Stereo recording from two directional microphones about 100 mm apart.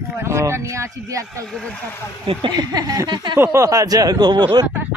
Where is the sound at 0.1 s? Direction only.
25° right (ahead or behind).